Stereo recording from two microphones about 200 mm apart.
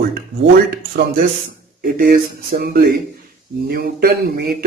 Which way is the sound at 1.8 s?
45° right (ahead or behind).